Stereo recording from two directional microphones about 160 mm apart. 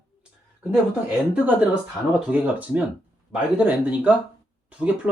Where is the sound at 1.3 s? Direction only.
10° right (ahead or behind).